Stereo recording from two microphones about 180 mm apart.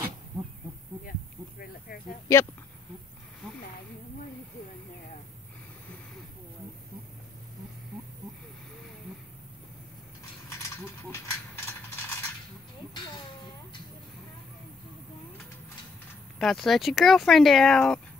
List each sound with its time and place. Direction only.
2.3 s speech: 15° left (ahead or behind)
10.5 s mechanisms: 15° left (ahead or behind)
16.3 s speech: centre (ahead or behind)